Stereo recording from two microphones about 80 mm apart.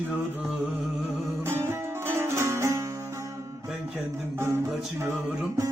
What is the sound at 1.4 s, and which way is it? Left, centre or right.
Music, right.